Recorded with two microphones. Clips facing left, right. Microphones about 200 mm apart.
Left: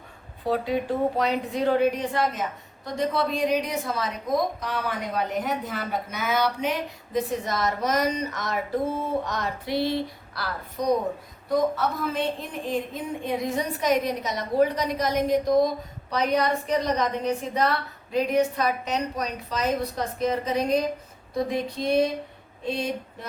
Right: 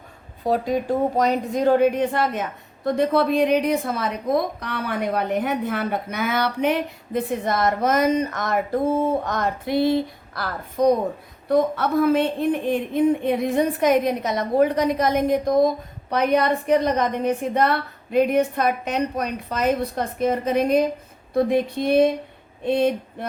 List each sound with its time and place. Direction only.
0.4 s a woman's voice: 45° right (ahead or behind)